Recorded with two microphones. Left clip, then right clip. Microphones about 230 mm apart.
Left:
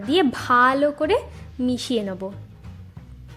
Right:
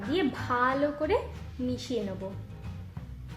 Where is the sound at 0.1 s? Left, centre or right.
Left.